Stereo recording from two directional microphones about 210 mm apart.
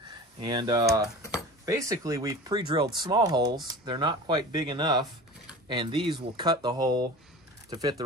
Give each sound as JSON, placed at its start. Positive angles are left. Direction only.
{"t": 0.4, "sound": "speech", "side_deg": -20}